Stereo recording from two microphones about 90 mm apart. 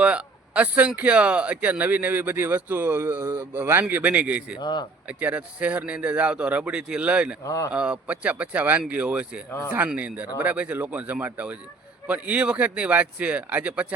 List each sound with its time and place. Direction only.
0.0 s speech: 15° right (ahead or behind)
4.6 s speech: 55° left (ahead or behind)
5.0 s speech: 15° right (ahead or behind)
7.4 s a man's voice: 40° left (ahead or behind)
7.7 s speech: 10° right (ahead or behind)